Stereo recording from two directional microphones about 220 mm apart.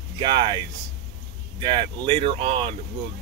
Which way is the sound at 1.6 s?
20° right (ahead or behind).